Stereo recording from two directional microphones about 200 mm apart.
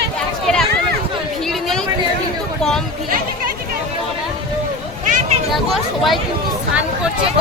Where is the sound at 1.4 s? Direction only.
Centre (ahead or behind).